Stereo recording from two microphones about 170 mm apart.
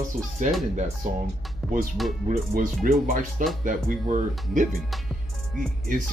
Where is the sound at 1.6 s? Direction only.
Centre (ahead or behind).